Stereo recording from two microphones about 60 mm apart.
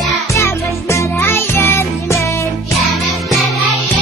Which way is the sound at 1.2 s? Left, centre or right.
Left.